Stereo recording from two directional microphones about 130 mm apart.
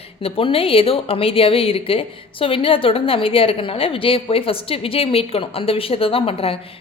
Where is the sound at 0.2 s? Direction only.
45° left (ahead or behind).